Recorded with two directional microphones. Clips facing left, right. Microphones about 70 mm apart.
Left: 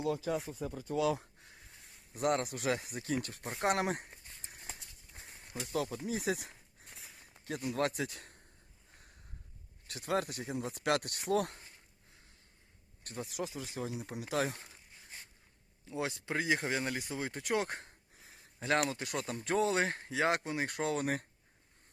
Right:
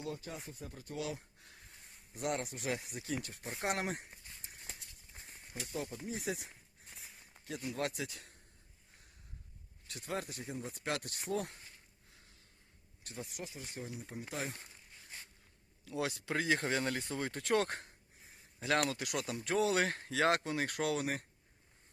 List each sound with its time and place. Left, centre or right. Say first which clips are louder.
0.3 s speech: left 11 dB; left
1.4 s a sound: left 1 dB; left
2.1 s speech: left 6 dB; left
5.1 s a sound: left 2 dB; left
5.7 s speech: left 6 dB; left
6.1 s a sound: left 5 dB; left
7.4 s a man's voice: left 4 dB; left
9.8 s speech: left 6 dB; left
13.2 s speech: left 7 dB; left
15.8 s speech: even; left
18.9 s speech: even; left
20.9 s a man's voice: left 2 dB; left